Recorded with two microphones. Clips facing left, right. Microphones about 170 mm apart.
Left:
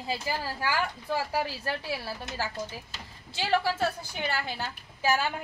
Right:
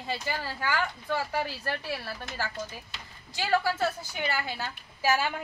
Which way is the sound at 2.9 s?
30° left (ahead or behind).